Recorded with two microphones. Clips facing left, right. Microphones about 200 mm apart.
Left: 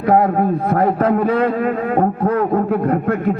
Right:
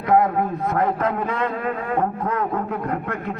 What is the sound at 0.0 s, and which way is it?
A man's voice, 30° left (ahead or behind).